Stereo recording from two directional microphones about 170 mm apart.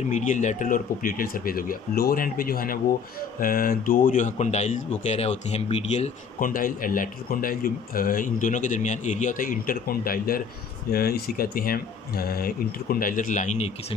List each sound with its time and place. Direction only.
0.1 s a man's voice: 45° left (ahead or behind)